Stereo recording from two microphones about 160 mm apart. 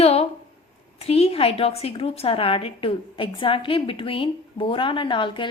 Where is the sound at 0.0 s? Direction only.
40° left (ahead or behind).